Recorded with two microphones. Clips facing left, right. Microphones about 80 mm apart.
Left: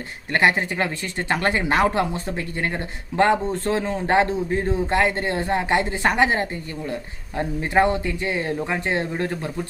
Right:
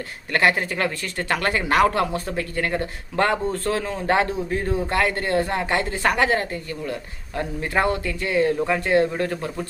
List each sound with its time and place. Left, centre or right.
0.3 s speech: left